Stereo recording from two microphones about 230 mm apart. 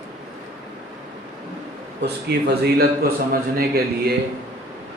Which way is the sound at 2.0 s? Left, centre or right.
Right.